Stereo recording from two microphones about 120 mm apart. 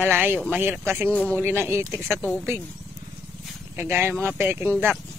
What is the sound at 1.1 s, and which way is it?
Speech, 10° left (ahead or behind).